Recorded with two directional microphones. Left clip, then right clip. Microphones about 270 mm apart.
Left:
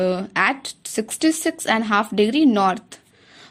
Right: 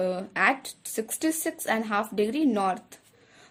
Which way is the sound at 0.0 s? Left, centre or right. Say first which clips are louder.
Left 5 dB; centre.